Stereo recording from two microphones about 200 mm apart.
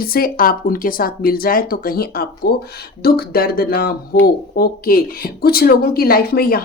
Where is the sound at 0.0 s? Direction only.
45° left (ahead or behind).